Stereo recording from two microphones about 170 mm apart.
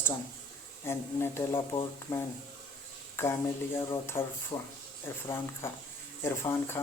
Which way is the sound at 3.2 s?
15° left (ahead or behind).